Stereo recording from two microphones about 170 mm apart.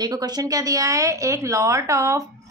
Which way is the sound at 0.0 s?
25° right (ahead or behind).